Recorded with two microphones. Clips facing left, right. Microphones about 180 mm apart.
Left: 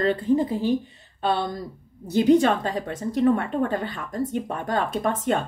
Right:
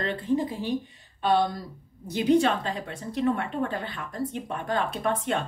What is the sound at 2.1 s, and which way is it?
A woman's voice, 45° left (ahead or behind).